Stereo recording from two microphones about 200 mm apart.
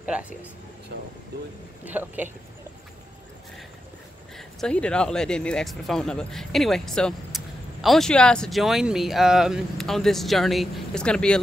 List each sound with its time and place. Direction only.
0.0 s speech: 5° right (ahead or behind)
0.9 s speech: 65° right (ahead or behind)
1.9 s speech: 10° right (ahead or behind)
4.4 s speech: 5° left (ahead or behind)